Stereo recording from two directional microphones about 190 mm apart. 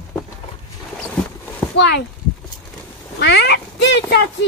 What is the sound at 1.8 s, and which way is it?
Speech, 65° left (ahead or behind).